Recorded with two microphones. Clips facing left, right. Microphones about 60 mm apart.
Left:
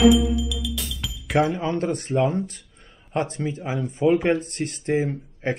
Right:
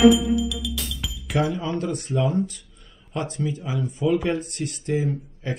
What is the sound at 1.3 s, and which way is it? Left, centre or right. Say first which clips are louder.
Speech: left 3 dB; left.